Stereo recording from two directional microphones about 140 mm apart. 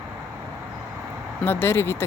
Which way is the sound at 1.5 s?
15° left (ahead or behind).